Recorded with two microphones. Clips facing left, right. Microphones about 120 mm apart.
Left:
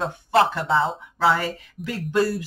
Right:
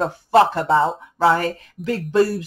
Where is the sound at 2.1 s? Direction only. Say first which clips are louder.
Right 4 dB; 30° right (ahead or behind).